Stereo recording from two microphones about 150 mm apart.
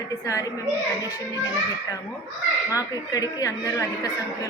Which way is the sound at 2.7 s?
25° left (ahead or behind).